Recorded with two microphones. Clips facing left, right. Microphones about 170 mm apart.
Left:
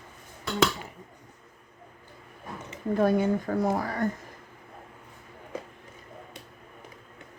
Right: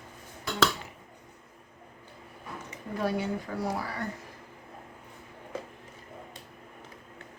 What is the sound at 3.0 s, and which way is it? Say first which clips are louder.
Speech: left 6 dB; 50° left (ahead or behind).